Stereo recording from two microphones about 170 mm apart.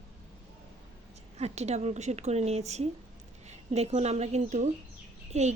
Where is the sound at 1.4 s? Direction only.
40° right (ahead or behind).